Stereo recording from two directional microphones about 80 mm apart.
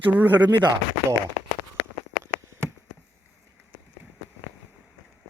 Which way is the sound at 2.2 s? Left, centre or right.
Right.